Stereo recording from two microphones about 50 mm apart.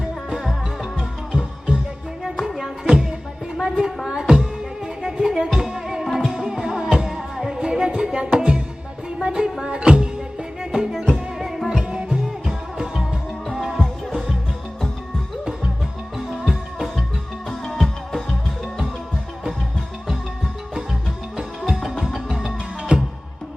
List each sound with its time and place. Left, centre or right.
0.0 s music: centre
10.6 s music: centre
11.8 s music: right
13.5 s music: centre
17.5 s music: centre
21.8 s music: centre
22.8 s music: centre